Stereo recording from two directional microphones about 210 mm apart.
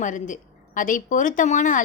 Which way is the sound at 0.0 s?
35° left (ahead or behind).